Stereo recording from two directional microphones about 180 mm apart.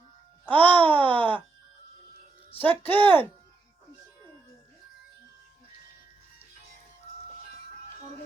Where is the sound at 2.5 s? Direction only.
10° left (ahead or behind).